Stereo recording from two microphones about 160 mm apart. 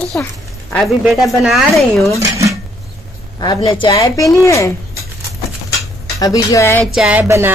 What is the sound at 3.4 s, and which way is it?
A woman's voice, 25° left (ahead or behind).